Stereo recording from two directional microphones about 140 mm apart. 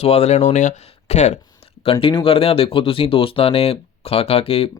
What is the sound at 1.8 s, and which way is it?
Speech, 40° left (ahead or behind).